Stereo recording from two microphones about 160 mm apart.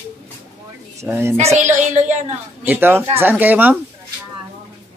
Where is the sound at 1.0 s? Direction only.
15° right (ahead or behind).